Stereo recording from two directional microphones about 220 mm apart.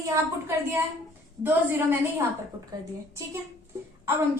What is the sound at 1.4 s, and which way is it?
Speech, 10° right (ahead or behind).